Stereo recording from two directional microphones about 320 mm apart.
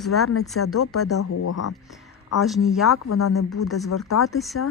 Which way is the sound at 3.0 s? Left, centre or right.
Left.